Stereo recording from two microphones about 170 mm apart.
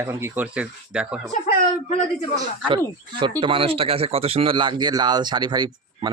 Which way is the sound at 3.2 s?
30° right (ahead or behind).